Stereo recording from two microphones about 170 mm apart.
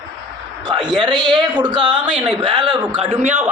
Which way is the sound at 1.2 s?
Centre (ahead or behind).